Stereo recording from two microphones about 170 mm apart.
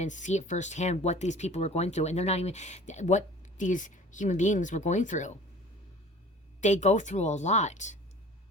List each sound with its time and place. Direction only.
0.0 s speech: 45° left (ahead or behind)
6.6 s speech: 45° left (ahead or behind)